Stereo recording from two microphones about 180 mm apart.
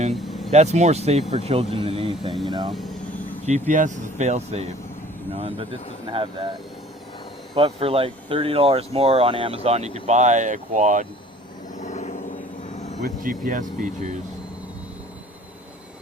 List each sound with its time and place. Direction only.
0.1 s vehicle: centre (ahead or behind)
0.5 s speech: 40° right (ahead or behind)
2.6 s speech: centre (ahead or behind)
3.7 s speech: 45° right (ahead or behind); by 6.5 s 30° right (ahead or behind)
7.5 s speech: 30° right (ahead or behind)
11.8 s vehicle: 40° left (ahead or behind)
13.0 s speech: 50° right (ahead or behind)